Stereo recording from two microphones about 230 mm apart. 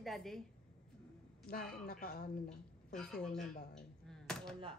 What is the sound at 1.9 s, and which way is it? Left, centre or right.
Speech, left.